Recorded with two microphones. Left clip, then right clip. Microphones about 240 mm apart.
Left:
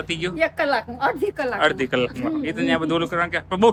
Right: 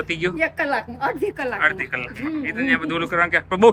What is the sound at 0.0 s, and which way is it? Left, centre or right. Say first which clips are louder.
Speech: right 1 dB; centre.